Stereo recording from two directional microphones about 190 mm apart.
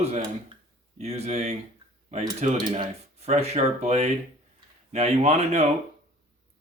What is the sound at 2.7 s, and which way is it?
Speech, 35° right (ahead or behind).